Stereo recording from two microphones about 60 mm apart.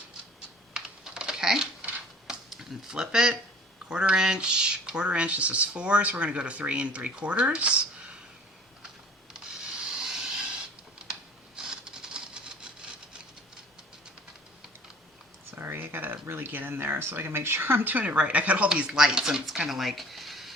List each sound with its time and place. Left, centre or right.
0.7 s typing: centre
2.2 s a sound: centre
3.8 s speech: centre
9.3 s rub: centre
11.1 s a sound: centre
15.5 s speech: right
18.7 s speech: centre